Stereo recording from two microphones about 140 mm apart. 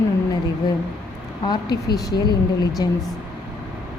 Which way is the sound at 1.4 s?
30° left (ahead or behind).